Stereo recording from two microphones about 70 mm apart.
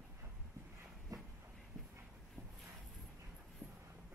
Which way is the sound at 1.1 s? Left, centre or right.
Right.